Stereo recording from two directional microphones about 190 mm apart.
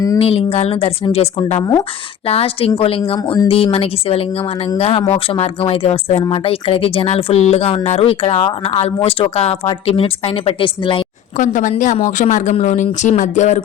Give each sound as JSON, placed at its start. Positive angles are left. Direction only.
{"t": 0.2, "sound": "speech", "side_deg": 30}
{"t": 11.3, "sound": "speech", "side_deg": 40}